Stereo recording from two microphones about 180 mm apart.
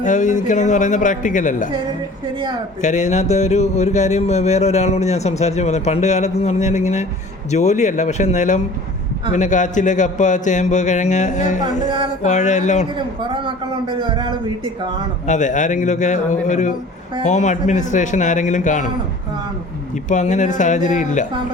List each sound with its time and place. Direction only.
0.0 s speech: 45° left (ahead or behind)
2.8 s a sound: 40° left (ahead or behind)
9.3 s speech: 45° left (ahead or behind)
12.2 s a sound: 40° left (ahead or behind)
13.3 s a man's voice: 25° right (ahead or behind)
15.3 s speech: 45° left (ahead or behind)
20.1 s speech: 40° left (ahead or behind)